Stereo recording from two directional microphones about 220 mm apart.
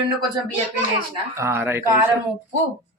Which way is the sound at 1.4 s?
10° right (ahead or behind).